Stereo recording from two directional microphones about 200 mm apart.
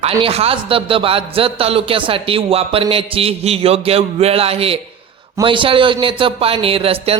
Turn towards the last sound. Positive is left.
turn(degrees=-30)  # may be behind; listen again after turning